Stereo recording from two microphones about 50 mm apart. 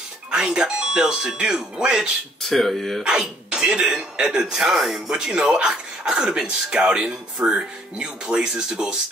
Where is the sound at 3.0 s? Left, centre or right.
Centre.